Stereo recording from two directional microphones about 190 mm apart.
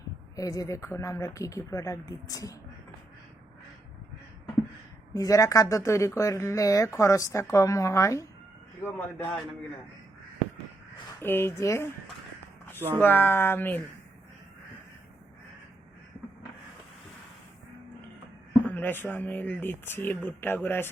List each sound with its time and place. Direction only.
0.3 s speech: 20° left (ahead or behind)
5.1 s speech: 20° left (ahead or behind)
11.2 s speech: 10° left (ahead or behind)
13.0 s speech: 10° left (ahead or behind)
18.6 s speech: 10° left (ahead or behind)